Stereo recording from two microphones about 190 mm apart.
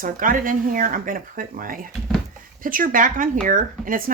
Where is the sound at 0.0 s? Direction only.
45° right (ahead or behind).